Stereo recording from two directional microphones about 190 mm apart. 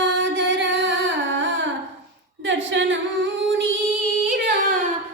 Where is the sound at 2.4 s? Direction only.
75° right (ahead or behind).